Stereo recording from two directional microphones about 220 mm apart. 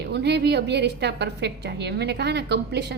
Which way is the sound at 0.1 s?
50° right (ahead or behind).